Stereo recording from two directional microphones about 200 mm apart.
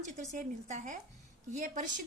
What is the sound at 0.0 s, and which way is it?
A woman's voice, 35° right (ahead or behind).